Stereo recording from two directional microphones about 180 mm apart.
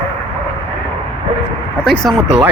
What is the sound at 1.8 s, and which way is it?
Speech, 5° left (ahead or behind).